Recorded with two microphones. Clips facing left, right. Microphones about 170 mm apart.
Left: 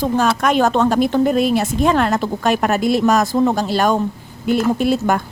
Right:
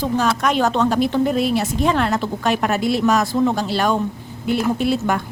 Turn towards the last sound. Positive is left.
turn(degrees=45)  # may be behind; listen again after turning